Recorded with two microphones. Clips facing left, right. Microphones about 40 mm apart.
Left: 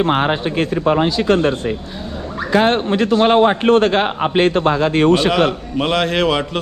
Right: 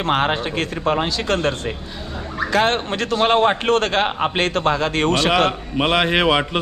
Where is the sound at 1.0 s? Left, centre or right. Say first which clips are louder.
Left 5 dB; centre.